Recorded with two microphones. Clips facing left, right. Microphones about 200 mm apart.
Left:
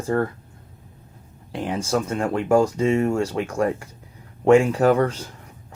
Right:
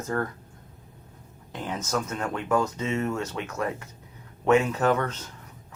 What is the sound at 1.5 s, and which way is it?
Speech, 30° left (ahead or behind).